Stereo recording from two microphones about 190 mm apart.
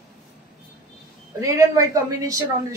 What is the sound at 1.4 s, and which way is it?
A woman's voice, 15° right (ahead or behind).